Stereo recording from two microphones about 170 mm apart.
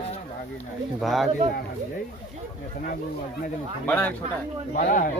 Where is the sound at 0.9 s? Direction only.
Centre (ahead or behind).